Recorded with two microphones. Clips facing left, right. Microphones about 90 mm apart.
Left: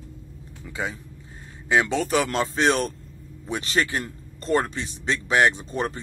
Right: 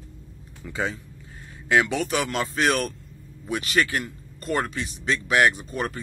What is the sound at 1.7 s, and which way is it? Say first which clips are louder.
Speech: even; 20° left (ahead or behind).